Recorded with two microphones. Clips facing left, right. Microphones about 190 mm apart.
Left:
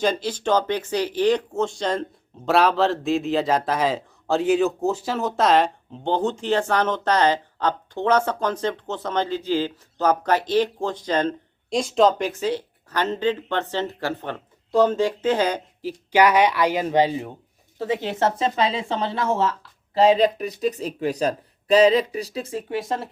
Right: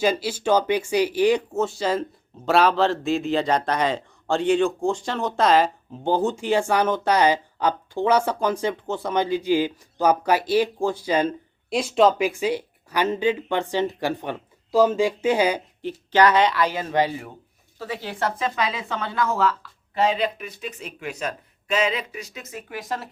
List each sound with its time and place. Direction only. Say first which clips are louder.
0.0 s speech: right 1 dB; 10° right (ahead or behind)
15.8 s speech: left 1 dB; 10° left (ahead or behind); by 23.0 s 25° left (ahead or behind)